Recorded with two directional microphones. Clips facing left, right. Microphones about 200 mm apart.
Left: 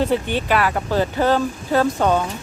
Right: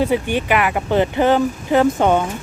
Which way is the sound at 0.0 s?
10° right (ahead or behind).